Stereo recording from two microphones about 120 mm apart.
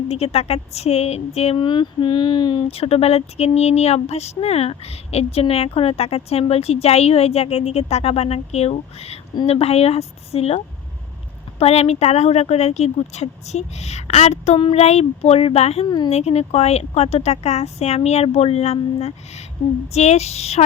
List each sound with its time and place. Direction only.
0.1 s speech: 60° left (ahead or behind); by 2.6 s 40° left (ahead or behind)
2.6 s speech: 55° left (ahead or behind)
11.6 s speech: 60° left (ahead or behind)